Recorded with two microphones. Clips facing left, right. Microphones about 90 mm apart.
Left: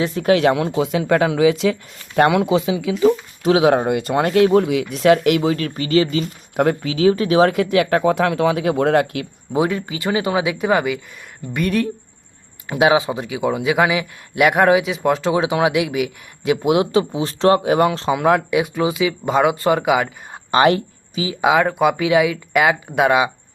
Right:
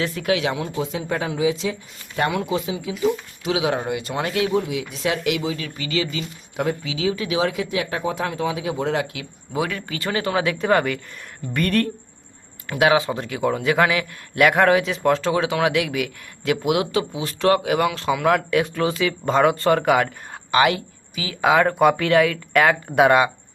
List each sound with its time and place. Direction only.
0.2 s speech: 40° left (ahead or behind)
0.8 s speech: 75° left (ahead or behind)
3.4 s speech: 50° left (ahead or behind)
4.5 s speech: 65° left (ahead or behind)
9.5 s a man's voice: 20° left (ahead or behind); by 11.9 s 5° left (ahead or behind)
12.6 s a man's voice: 20° left (ahead or behind)
20.5 s a sound: 30° left (ahead or behind)
21.5 s a man's voice: 5° left (ahead or behind)